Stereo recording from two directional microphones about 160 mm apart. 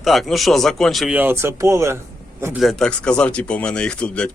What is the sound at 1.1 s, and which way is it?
Speech, 15° right (ahead or behind).